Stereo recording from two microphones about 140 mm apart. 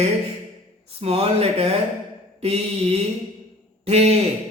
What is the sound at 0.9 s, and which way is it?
A man's voice, 45° right (ahead or behind).